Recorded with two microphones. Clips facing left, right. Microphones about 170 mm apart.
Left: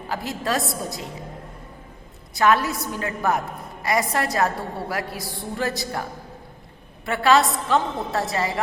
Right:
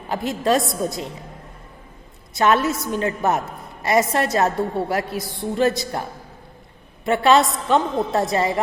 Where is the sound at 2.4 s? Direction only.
20° right (ahead or behind).